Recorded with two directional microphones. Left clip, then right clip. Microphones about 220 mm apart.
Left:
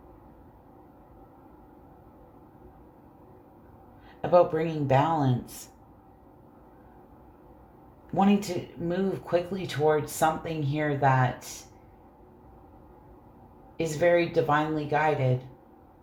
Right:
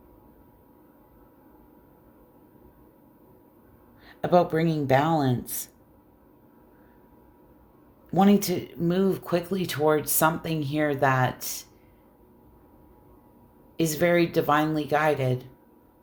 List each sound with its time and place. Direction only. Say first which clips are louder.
4.2 s speech: even; 40° right (ahead or behind)
8.1 s speech: right 3 dB; 45° right (ahead or behind)
13.7 s speech: right 1 dB; 40° right (ahead or behind)